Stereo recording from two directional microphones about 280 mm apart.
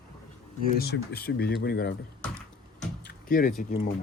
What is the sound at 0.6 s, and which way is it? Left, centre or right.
Speech, left.